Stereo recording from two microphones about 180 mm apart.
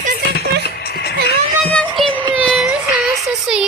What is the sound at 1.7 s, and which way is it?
Music, 5° left (ahead or behind).